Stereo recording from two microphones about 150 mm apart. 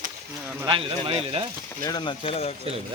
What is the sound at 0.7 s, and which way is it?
Speech, 35° right (ahead or behind).